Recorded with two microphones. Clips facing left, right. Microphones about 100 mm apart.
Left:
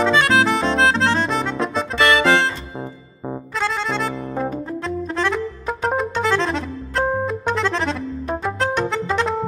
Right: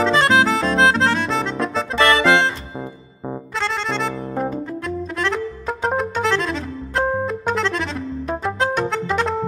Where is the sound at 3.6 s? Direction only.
5° left (ahead or behind).